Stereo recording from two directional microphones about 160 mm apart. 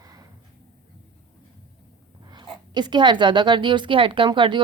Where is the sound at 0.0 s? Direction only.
25° right (ahead or behind).